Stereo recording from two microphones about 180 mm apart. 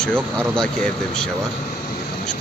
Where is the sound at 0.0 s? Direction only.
5° left (ahead or behind).